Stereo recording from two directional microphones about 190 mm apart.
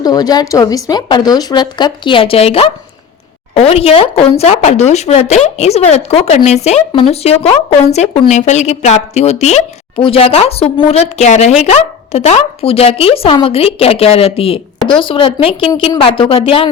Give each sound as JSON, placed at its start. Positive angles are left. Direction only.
{"t": 0.0, "sound": "a woman's voice", "side_deg": 20}